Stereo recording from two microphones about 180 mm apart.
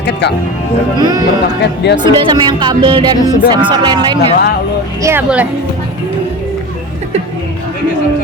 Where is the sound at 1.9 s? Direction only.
25° right (ahead or behind).